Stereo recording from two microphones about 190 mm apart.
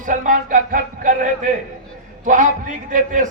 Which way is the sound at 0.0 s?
45° right (ahead or behind).